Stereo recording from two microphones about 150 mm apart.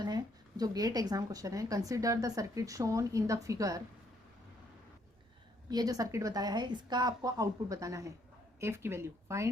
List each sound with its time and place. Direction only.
0.0 s speech: 25° right (ahead or behind)
5.6 s speech: 25° right (ahead or behind)